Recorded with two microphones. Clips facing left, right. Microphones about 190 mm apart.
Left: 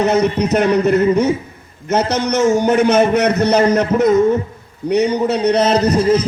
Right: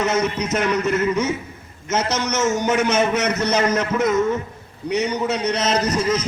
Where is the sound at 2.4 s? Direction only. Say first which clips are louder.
Left 7 dB; 35° left (ahead or behind).